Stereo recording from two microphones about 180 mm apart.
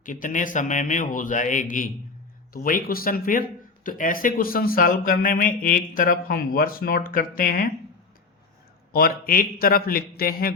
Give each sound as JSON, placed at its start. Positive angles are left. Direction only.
{"t": 0.0, "sound": "speech", "side_deg": 45}
{"t": 8.9, "sound": "a man's voice", "side_deg": 55}